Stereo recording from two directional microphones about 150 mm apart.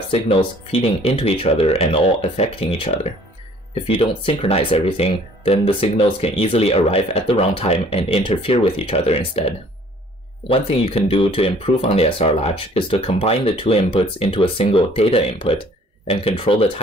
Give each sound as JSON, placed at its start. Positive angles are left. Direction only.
{"t": 0.1, "sound": "speech", "side_deg": 40}
{"t": 10.5, "sound": "speech", "side_deg": 40}